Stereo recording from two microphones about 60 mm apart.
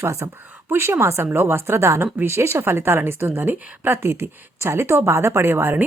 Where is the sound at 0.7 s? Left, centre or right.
Right.